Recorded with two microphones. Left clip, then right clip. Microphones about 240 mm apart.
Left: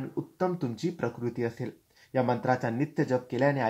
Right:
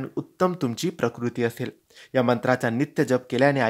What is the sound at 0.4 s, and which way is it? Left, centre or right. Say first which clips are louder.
Speech: right 7 dB; right.